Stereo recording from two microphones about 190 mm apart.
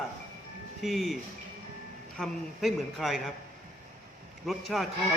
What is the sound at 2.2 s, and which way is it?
A man's voice, centre (ahead or behind).